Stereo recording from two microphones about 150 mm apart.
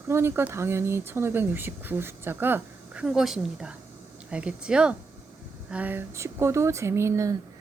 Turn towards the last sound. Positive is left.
turn(degrees=-20)  # may be behind; listen again after turning